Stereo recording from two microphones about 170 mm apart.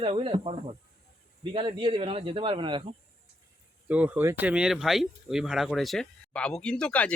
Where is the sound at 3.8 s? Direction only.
10° right (ahead or behind).